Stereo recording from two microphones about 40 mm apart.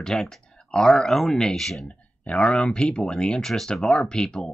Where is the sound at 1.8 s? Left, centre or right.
Left.